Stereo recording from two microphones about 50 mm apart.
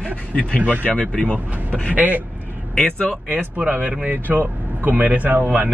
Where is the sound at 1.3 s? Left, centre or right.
Left.